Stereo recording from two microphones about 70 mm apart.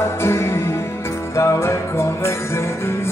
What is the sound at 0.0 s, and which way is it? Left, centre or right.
Music, left.